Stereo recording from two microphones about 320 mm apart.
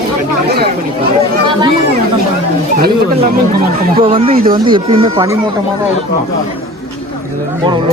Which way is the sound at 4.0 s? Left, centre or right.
Centre.